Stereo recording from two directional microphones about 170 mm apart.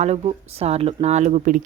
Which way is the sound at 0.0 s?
40° right (ahead or behind).